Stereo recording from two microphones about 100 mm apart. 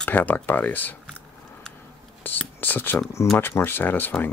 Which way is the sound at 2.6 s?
20° left (ahead or behind).